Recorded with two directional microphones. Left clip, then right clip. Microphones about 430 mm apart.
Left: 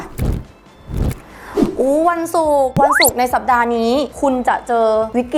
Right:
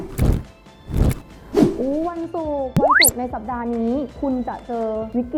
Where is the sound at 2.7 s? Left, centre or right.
Centre.